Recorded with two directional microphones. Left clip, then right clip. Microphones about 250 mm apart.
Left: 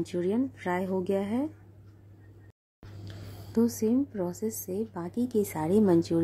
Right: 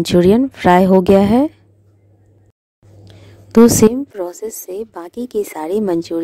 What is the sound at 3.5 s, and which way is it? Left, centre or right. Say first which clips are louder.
A woman's voice: right 18 dB; right.